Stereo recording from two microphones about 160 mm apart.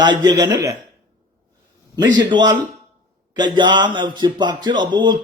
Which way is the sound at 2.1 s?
25° right (ahead or behind).